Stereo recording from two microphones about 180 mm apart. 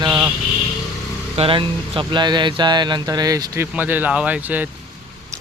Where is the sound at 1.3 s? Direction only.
30° right (ahead or behind); by 4.7 s 10° right (ahead or behind).